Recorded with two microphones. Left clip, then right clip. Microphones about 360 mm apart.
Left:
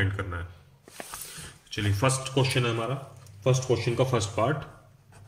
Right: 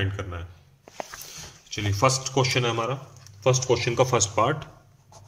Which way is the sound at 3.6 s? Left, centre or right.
Right.